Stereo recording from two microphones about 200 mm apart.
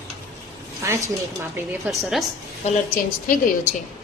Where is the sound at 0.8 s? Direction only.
15° right (ahead or behind).